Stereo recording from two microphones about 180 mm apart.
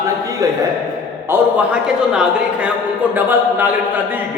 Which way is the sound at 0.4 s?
20° right (ahead or behind).